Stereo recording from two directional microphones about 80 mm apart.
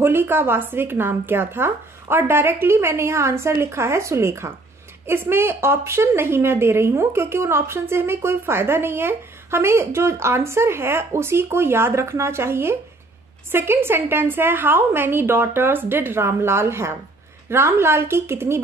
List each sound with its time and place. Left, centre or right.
0.0 s a woman's voice: right